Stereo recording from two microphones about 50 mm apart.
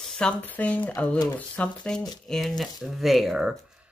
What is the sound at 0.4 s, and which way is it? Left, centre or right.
Speech, left.